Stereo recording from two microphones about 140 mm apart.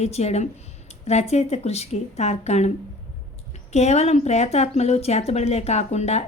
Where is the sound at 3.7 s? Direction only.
55° left (ahead or behind).